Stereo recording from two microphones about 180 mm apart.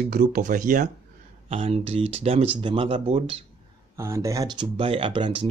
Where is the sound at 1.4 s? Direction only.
35° right (ahead or behind).